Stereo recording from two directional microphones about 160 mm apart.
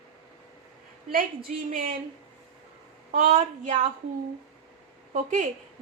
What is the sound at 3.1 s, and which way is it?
Speech, 55° right (ahead or behind).